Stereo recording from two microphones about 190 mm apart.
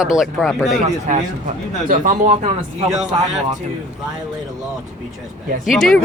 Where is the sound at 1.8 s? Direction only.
40° right (ahead or behind).